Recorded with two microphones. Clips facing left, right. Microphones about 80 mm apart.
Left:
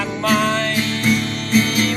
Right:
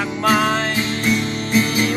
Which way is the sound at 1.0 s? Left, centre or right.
Centre.